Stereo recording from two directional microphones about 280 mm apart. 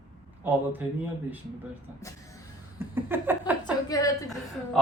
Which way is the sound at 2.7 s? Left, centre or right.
Centre.